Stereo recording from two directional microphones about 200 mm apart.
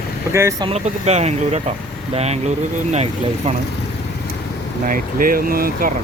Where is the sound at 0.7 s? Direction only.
35° right (ahead or behind).